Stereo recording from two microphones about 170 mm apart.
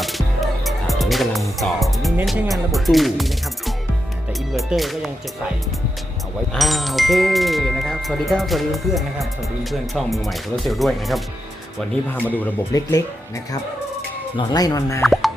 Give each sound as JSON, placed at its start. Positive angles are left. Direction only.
{"t": 0.0, "sound": "music", "side_deg": 0}
{"t": 2.2, "sound": "speech", "side_deg": 0}
{"t": 6.5, "sound": "speech", "side_deg": 0}
{"t": 12.0, "sound": "speech", "side_deg": 10}
{"t": 12.7, "sound": "speech", "side_deg": 20}
{"t": 15.0, "sound": "plop", "side_deg": 0}